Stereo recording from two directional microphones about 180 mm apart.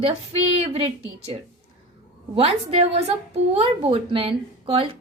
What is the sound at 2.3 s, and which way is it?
A woman's voice, 35° right (ahead or behind).